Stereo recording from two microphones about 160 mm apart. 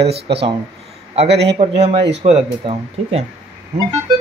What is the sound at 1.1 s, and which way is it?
Speech, 40° right (ahead or behind).